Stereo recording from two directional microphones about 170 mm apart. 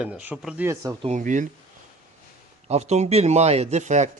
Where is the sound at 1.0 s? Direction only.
45° right (ahead or behind).